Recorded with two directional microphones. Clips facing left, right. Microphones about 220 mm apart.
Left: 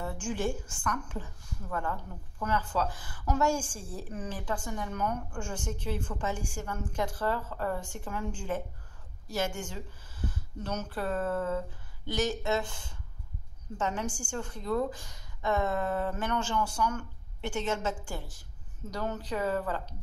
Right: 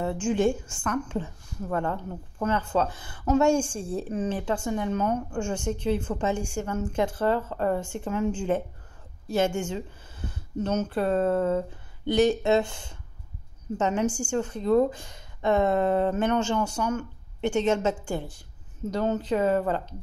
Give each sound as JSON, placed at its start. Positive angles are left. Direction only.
{"t": 0.0, "sound": "a woman's voice", "side_deg": -25}
{"t": 18.1, "sound": "a woman's voice", "side_deg": -60}
{"t": 18.9, "sound": "a woman's voice", "side_deg": -20}